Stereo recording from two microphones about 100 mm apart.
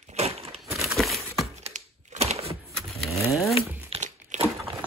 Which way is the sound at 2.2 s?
90° right.